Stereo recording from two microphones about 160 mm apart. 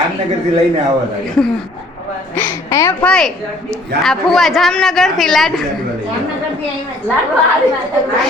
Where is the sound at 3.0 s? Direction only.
5° left (ahead or behind).